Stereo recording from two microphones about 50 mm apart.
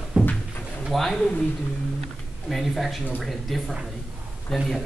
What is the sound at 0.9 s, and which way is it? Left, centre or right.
Speech, centre.